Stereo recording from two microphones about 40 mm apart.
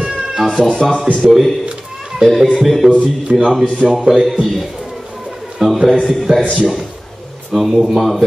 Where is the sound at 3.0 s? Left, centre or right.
Right.